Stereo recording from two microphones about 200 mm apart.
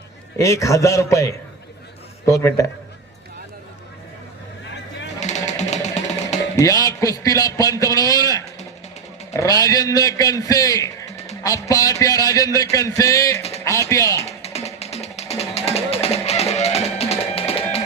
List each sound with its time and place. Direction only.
0.3 s a man's voice: 15° left (ahead or behind)
5.2 s music: 35° left (ahead or behind)
6.6 s a man's voice: 15° left (ahead or behind)
14.3 s music: 30° left (ahead or behind)